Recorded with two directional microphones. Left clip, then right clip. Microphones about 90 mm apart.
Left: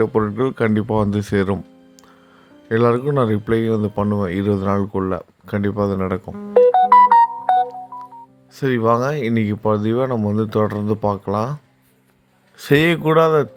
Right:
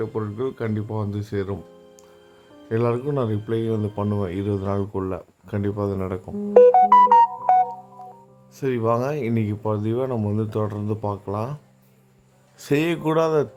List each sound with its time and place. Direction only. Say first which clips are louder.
0.0 s speech: left 9 dB; 70° left (ahead or behind); by 1.5 s 90° left
2.6 s speech: left 7 dB; 25° left (ahead or behind)
3.1 s speech: left 7 dB; 40° left (ahead or behind)
4.0 s a man's voice: left 5 dB; 40° left (ahead or behind)
4.3 s speech: left 6 dB; 30° left (ahead or behind)
6.9 s music: left 3 dB; 5° right (ahead or behind)
7.5 s telephone dialing: left 1 dB; 25° left (ahead or behind)
8.5 s speech: left 5 dB; 20° left (ahead or behind)
12.5 s speech: left 7 dB; 30° left (ahead or behind)
13.0 s a man's voice: left 6 dB; 10° left (ahead or behind)